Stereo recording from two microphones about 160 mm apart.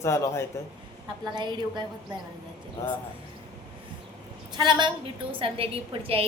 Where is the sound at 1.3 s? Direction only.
25° right (ahead or behind).